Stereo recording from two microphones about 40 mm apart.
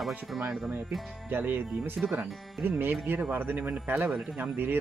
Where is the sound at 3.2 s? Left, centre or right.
Right.